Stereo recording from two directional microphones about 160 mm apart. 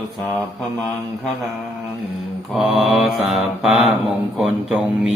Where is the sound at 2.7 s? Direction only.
Centre (ahead or behind).